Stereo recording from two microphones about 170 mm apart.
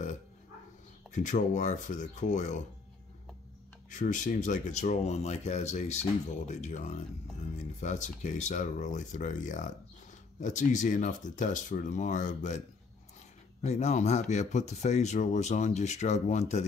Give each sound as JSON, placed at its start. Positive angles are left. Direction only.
{"t": 1.1, "sound": "speech", "side_deg": 45}
{"t": 3.9, "sound": "speech", "side_deg": 50}